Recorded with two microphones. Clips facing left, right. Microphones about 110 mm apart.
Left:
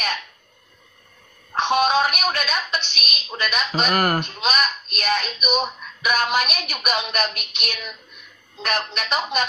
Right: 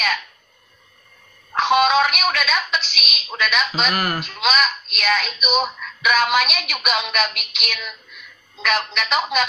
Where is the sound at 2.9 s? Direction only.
40° left (ahead or behind).